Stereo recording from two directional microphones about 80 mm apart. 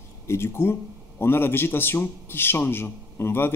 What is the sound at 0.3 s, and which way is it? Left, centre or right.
A man's voice, left.